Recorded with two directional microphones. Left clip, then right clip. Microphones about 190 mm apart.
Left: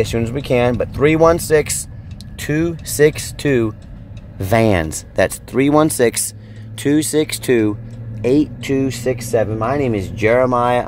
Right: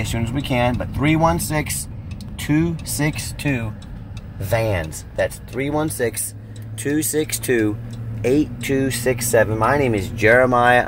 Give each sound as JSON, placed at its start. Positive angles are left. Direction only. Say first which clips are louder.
{"t": 0.2, "sound": "speech", "louder": "even", "side_deg": 50}
{"t": 6.8, "sound": "speech", "louder": "left 5 dB", "side_deg": 30}
{"t": 8.7, "sound": "speech", "louder": "left 1 dB", "side_deg": 20}